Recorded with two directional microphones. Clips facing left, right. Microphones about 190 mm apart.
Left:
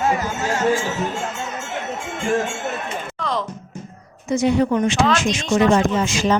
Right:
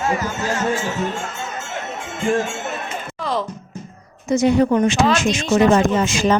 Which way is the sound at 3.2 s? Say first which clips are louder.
Right 2 dB; 5° right (ahead or behind).